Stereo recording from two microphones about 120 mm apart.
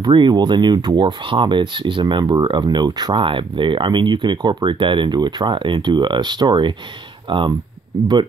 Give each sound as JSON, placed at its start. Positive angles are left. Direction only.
{"t": 0.0, "sound": "speech", "side_deg": -40}